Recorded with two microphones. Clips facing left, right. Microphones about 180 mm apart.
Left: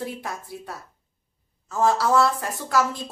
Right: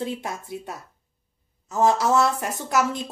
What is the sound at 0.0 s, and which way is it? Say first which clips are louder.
Speech: right 2 dB; 20° right (ahead or behind).